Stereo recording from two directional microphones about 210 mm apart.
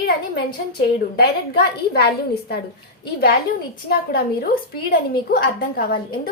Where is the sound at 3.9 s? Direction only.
45° left (ahead or behind).